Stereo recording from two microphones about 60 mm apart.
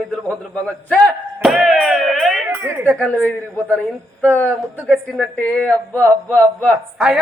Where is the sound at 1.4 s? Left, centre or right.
Centre.